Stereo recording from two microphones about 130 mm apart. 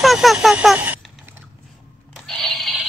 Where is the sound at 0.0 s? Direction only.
Centre (ahead or behind).